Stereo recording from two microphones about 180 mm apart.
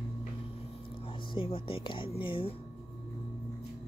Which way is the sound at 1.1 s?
30° left (ahead or behind).